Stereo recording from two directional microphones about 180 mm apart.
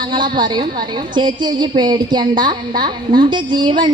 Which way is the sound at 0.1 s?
25° right (ahead or behind).